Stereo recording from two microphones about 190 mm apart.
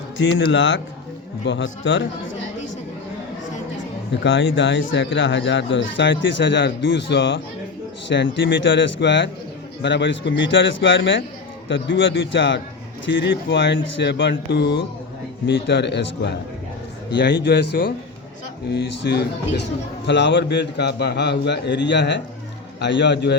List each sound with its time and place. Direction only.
0.2 s speech: 70° left (ahead or behind)
4.2 s a man's voice: 75° left (ahead or behind); by 19.3 s 60° left (ahead or behind)
20.1 s speech: 70° left (ahead or behind)